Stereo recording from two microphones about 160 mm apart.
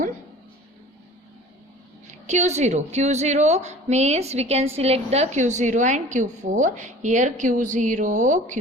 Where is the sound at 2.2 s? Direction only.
45° right (ahead or behind).